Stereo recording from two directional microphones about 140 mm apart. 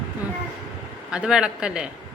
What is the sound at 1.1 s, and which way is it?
Speech, 5° right (ahead or behind).